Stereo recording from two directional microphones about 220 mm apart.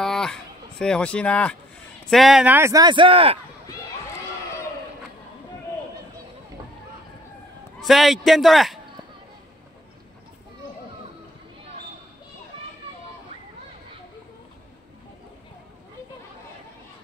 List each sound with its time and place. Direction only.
0.0 s a sound: centre (ahead or behind)
2.0 s speech: centre (ahead or behind); by 3.3 s 25° right (ahead or behind)
7.8 s a man's voice: centre (ahead or behind)